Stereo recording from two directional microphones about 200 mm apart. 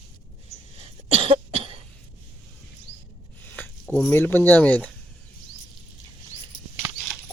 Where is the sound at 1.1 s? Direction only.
30° right (ahead or behind).